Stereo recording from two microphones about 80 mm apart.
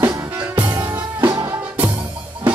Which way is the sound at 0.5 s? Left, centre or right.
Right.